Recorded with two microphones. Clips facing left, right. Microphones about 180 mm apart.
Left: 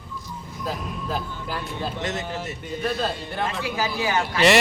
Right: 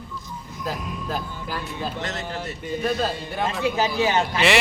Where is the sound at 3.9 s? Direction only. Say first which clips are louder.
Right 3 dB; 25° right (ahead or behind).